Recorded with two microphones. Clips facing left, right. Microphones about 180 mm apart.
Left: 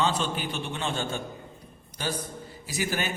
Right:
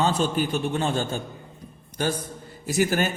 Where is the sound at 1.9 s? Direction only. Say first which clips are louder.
Right 6 dB; 50° right (ahead or behind).